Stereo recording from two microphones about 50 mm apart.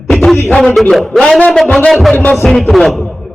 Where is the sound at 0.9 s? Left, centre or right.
Centre.